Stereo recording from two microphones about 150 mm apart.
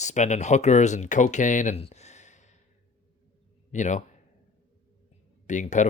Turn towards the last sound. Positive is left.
turn(degrees=55)  # may be behind; listen again after turning